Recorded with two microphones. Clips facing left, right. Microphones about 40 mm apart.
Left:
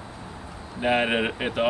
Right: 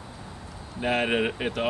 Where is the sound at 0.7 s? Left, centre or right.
Centre.